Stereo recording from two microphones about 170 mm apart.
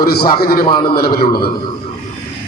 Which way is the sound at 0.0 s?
65° left (ahead or behind).